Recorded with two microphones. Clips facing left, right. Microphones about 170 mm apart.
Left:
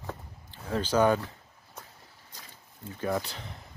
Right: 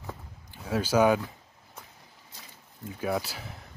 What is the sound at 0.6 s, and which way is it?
Speech, 10° right (ahead or behind).